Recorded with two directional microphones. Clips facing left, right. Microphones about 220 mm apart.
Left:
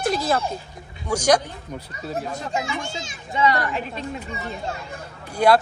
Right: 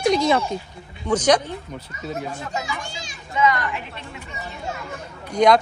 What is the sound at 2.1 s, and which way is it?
A child's voice, 30° left (ahead or behind).